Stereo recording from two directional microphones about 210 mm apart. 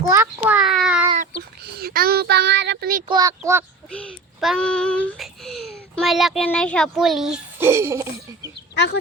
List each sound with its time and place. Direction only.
0.1 s a child's voice: 10° right (ahead or behind)
1.4 s child singing: 45° right (ahead or behind)
3.1 s speech: 15° right (ahead or behind)
3.9 s child singing: centre (ahead or behind)
8.7 s speech: 55° left (ahead or behind)